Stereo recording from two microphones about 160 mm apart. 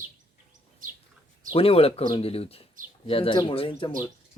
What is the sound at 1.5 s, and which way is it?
Speech, 35° left (ahead or behind).